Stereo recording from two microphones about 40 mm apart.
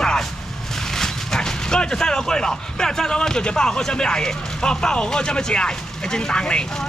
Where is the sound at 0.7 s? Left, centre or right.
Centre.